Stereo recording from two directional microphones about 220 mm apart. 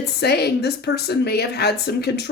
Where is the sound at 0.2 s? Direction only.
50° left (ahead or behind).